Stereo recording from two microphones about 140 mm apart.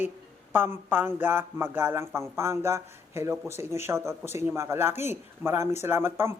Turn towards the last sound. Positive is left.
turn(degrees=-15)  # may be behind; listen again after turning